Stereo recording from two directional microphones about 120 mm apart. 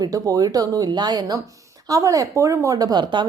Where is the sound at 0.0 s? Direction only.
30° right (ahead or behind).